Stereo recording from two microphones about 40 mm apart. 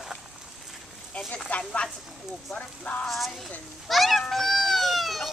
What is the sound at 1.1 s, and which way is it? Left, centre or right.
Speech, left.